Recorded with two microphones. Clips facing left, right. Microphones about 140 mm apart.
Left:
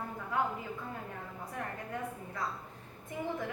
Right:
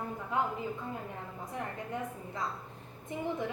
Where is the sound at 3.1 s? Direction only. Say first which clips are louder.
Right 1 dB; 20° right (ahead or behind).